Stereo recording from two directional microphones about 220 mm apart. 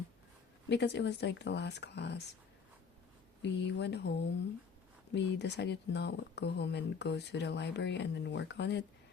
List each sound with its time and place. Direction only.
0.7 s speech: 50° left (ahead or behind)
3.4 s speech: 50° left (ahead or behind)